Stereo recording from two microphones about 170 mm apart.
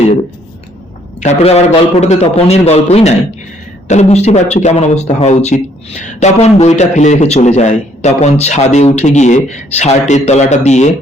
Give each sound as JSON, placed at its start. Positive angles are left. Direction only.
{"t": 1.2, "sound": "a man's voice", "side_deg": 40}